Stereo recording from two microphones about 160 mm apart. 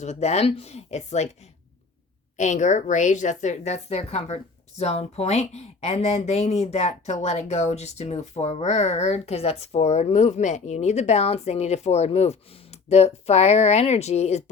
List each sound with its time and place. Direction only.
0.0 s speech: 45° left (ahead or behind)
2.3 s speech: 50° left (ahead or behind)